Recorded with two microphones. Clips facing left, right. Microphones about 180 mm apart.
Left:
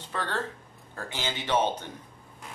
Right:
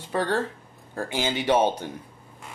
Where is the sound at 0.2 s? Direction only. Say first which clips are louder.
Right 6 dB; 10° right (ahead or behind).